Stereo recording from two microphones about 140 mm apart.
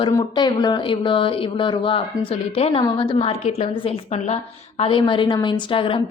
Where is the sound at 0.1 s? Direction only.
30° left (ahead or behind).